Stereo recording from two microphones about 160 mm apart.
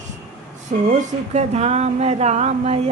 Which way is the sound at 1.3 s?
45° right (ahead or behind).